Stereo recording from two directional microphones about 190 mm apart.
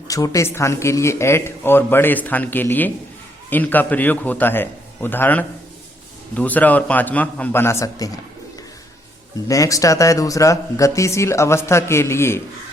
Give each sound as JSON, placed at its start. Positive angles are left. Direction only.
{"t": 0.1, "sound": "speech", "side_deg": 15}
{"t": 9.5, "sound": "speech", "side_deg": 15}